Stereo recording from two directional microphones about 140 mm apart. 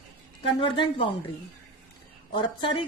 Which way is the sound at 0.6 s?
40° left (ahead or behind).